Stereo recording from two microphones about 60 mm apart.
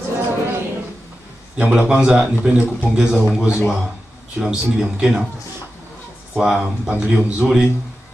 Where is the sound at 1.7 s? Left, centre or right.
Centre.